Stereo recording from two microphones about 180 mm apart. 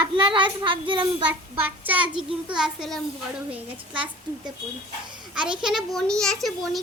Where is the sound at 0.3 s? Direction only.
30° right (ahead or behind).